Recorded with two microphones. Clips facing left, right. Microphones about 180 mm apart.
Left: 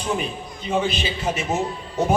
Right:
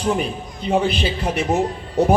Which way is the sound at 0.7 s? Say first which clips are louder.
Right 4 dB; 65° right (ahead or behind).